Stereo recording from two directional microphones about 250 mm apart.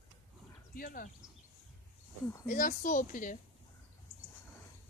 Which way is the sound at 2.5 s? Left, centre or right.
Left.